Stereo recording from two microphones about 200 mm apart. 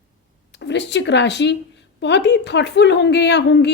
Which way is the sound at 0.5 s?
60° left (ahead or behind).